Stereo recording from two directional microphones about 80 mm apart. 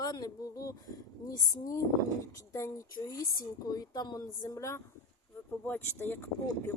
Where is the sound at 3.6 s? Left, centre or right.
Left.